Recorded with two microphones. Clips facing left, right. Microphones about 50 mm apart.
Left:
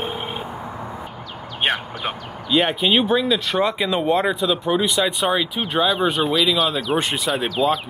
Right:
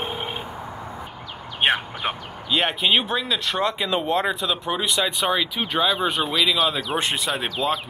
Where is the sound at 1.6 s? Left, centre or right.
Centre.